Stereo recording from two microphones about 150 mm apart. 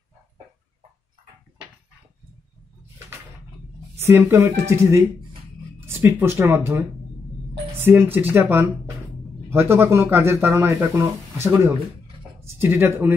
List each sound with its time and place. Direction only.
4.0 s speech: 15° right (ahead or behind)